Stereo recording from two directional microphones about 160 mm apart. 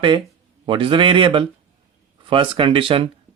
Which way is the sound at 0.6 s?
30° right (ahead or behind).